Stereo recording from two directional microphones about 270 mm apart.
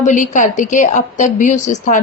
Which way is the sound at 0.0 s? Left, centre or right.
Left.